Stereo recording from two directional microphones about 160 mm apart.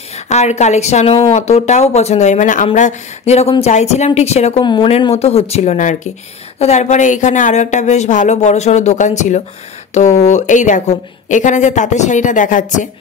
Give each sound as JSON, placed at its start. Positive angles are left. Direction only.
{"t": 0.3, "sound": "speech", "side_deg": 45}